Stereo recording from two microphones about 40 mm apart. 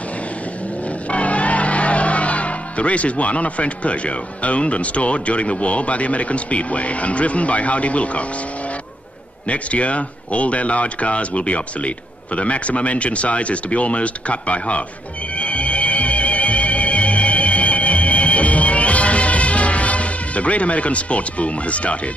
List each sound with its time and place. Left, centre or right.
1.1 s speech: left
9.5 s speech: left
15.3 s music: left